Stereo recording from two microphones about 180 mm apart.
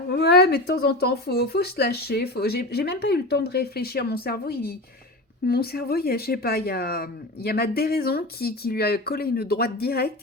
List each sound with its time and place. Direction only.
0.1 s speech: 65° left (ahead or behind)